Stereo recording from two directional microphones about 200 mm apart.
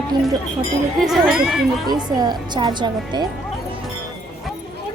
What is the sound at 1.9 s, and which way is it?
Speech, 20° right (ahead or behind).